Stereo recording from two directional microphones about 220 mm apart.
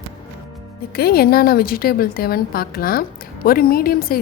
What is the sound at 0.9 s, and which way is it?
A woman's voice, 45° left (ahead or behind).